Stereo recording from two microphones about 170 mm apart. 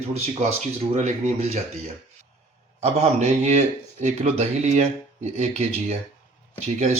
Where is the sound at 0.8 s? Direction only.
40° right (ahead or behind).